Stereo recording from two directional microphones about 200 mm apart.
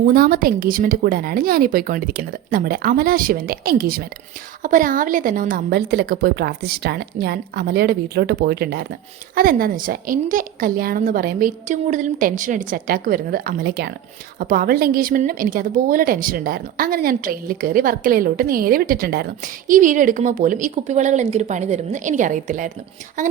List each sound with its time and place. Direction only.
0.1 s a woman's voice: 45° right (ahead or behind)